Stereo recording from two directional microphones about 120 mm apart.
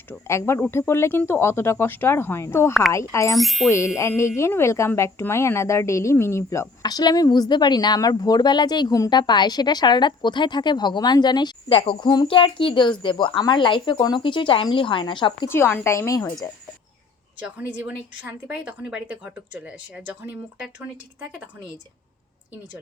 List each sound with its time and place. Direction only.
0.1 s speech: 20° left (ahead or behind)
3.3 s speech: centre (ahead or behind)
3.7 s a woman's voice: 25° left (ahead or behind); by 15.4 s 40° left (ahead or behind)
15.4 s speech: 20° left (ahead or behind)
17.4 s a woman's voice: 10° right (ahead or behind)